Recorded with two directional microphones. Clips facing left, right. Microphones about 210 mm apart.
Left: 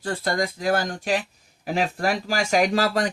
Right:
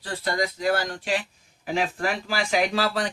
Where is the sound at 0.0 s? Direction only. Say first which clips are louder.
Left 2 dB; 50° left (ahead or behind).